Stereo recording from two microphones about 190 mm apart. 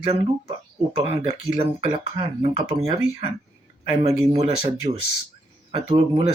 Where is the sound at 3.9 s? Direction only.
25° right (ahead or behind).